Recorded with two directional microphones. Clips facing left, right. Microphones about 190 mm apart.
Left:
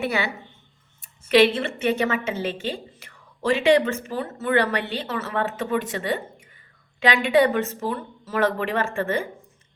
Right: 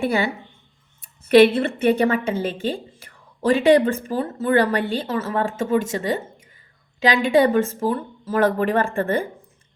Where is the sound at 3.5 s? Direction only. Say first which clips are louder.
Right 3 dB; 40° right (ahead or behind).